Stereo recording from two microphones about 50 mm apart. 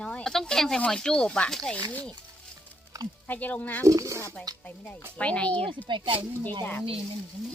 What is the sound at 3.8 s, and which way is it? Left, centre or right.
Speech, right.